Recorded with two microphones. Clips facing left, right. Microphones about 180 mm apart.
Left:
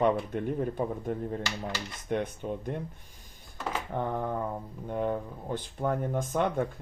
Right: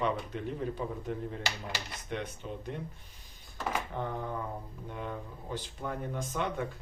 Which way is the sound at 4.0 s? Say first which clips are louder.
Left 5 dB; 55° left (ahead or behind).